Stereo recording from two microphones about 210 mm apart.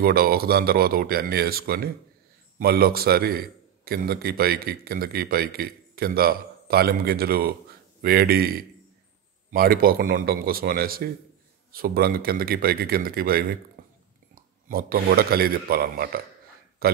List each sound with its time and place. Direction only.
0.0 s a man's voice: 45° right (ahead or behind)
13.8 s a sound: 45° right (ahead or behind)
14.3 s a man's voice: 45° right (ahead or behind)